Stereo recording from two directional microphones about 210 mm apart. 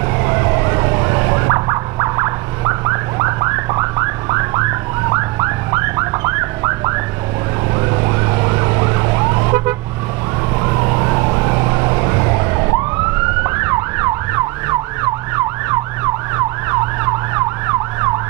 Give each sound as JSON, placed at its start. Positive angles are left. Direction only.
{"t": 0.2, "sound": "emergency vehicle", "side_deg": -20}